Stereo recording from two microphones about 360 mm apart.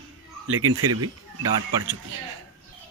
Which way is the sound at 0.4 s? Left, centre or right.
Right.